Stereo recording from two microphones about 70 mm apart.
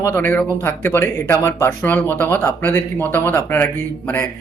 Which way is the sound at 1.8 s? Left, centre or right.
Left.